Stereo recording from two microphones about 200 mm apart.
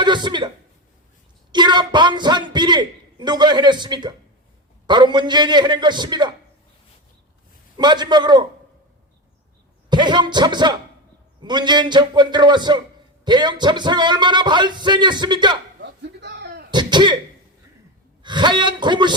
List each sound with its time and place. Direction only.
0.0 s a sound: 25° right (ahead or behind)
1.5 s a man's voice: 20° right (ahead or behind)
7.8 s speech: 20° right (ahead or behind)
9.9 s speech: 20° right (ahead or behind)
15.8 s a sound: 60° right (ahead or behind)
16.7 s speech: 20° right (ahead or behind)
18.2 s a man's voice: 20° right (ahead or behind)